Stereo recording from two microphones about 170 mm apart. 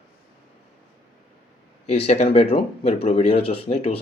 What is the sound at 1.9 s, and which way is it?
Speech, 40° left (ahead or behind).